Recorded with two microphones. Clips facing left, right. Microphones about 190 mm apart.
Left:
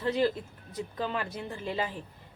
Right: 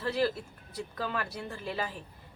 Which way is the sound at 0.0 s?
20° left (ahead or behind).